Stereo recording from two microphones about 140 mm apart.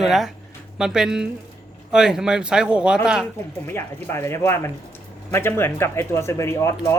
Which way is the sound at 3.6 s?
15° left (ahead or behind).